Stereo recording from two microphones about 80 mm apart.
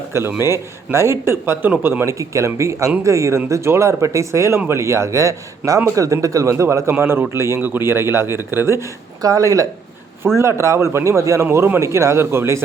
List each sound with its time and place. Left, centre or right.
0.1 s a man's voice: right
9.2 s a man's voice: right